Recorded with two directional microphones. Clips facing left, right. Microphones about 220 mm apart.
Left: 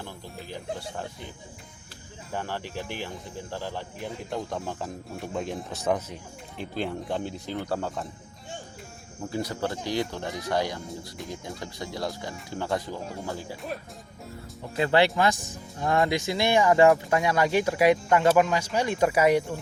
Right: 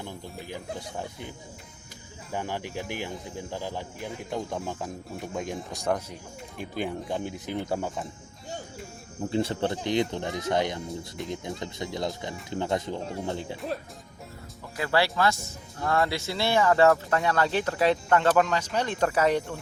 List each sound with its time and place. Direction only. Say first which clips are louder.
2.3 s speech: right 1 dB; 15° right (ahead or behind)
4.0 s speech: even; centre (ahead or behind)
6.6 s speech: left 1 dB; 15° right (ahead or behind)
9.3 s speech: right 3 dB; 25° right (ahead or behind)
14.8 s speech: left 3 dB; 20° left (ahead or behind)